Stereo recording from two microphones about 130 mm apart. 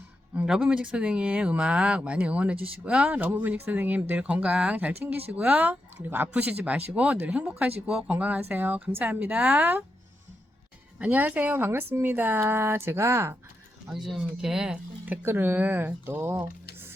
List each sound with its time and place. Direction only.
0.3 s speech: 5° right (ahead or behind)
11.0 s speech: 10° right (ahead or behind)
13.9 s speech: centre (ahead or behind); by 16.5 s 15° right (ahead or behind)